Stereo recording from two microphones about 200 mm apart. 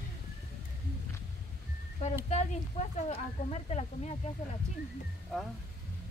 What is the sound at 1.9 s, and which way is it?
Speech, 35° left (ahead or behind).